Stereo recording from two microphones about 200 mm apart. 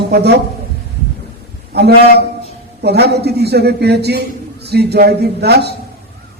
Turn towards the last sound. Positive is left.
turn(degrees=-55)  # may be behind; listen again after turning